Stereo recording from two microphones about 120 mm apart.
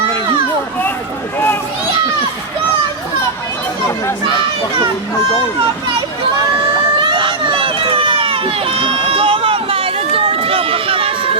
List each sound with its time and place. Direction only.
7.0 s run: 40° right (ahead or behind)